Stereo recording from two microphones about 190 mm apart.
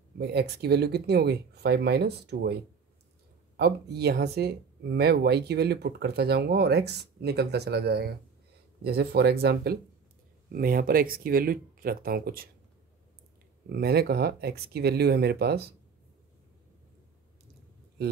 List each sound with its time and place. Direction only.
0.2 s speech: 60° right (ahead or behind)
13.7 s speech: 55° right (ahead or behind)
18.0 s speech: 55° right (ahead or behind)